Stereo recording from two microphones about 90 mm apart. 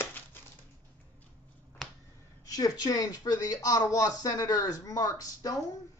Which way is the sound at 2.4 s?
40° left (ahead or behind).